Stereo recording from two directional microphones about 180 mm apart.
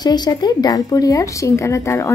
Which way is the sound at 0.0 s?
25° left (ahead or behind).